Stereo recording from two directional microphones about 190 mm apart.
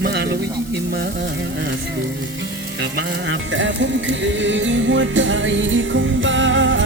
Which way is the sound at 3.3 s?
80° right.